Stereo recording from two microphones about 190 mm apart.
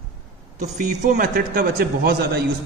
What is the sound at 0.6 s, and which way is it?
Speech, 40° right (ahead or behind).